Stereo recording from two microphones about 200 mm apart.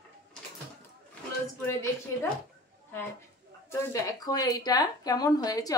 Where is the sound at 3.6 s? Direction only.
15° left (ahead or behind).